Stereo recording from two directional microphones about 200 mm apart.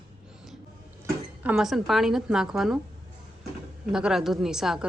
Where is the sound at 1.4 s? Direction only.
5° right (ahead or behind).